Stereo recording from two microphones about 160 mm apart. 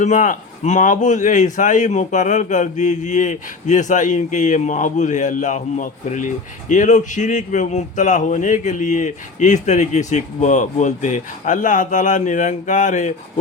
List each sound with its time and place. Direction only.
0.0 s a man's voice: 50° left (ahead or behind)